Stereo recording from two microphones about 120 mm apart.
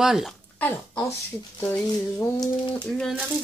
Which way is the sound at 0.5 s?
15° left (ahead or behind).